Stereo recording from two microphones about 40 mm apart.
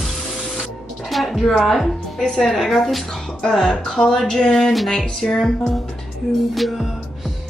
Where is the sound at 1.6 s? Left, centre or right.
Centre.